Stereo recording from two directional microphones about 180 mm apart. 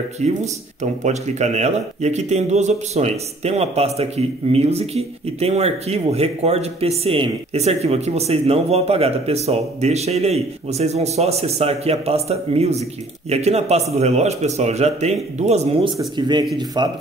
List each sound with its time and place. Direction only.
0.2 s a man's voice: 40° right (ahead or behind)
16.2 s a man's voice: 25° right (ahead or behind)